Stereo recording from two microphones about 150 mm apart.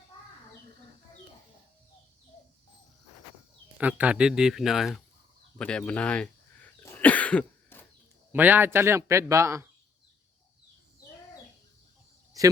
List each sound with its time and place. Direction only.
3.8 s speech: 10° right (ahead or behind)
5.5 s throat clearing: 5° left (ahead or behind)
8.3 s speech: 10° right (ahead or behind)
12.4 s cricket: 25° right (ahead or behind)